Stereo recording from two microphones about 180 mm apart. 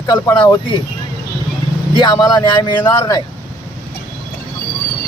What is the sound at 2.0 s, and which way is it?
Speech, 25° left (ahead or behind).